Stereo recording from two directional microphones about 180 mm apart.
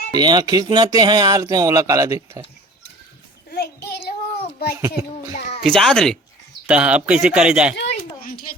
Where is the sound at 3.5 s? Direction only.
60° left (ahead or behind).